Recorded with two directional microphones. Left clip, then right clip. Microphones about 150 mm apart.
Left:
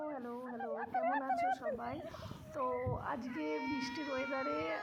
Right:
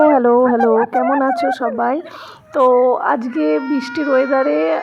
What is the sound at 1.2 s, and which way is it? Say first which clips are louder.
A woman's voice: right 19 dB; 55° right (ahead or behind).